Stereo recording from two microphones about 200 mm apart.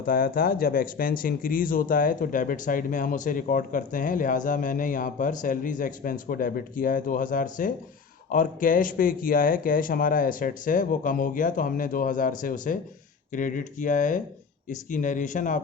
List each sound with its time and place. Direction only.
0.0 s speech: 45° left (ahead or behind)